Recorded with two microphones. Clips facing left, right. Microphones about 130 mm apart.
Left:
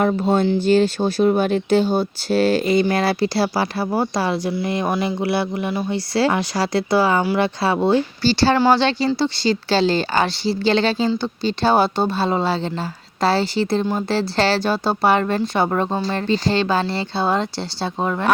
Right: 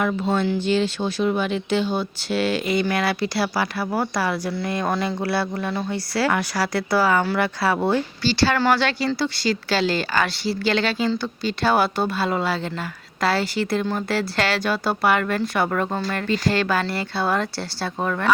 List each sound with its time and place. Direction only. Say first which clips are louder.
0.0 s speech: left 4 dB; 35° left (ahead or behind)
8.5 s speech: left 4 dB; 20° left (ahead or behind)